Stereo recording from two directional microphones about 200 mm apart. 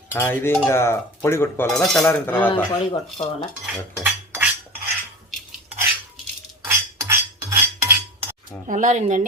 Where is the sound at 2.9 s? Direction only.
25° left (ahead or behind).